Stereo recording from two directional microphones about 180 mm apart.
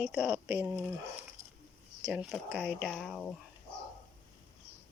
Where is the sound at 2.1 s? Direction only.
5° right (ahead or behind).